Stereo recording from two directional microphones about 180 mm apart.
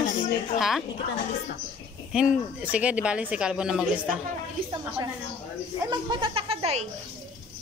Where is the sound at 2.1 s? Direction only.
5° right (ahead or behind).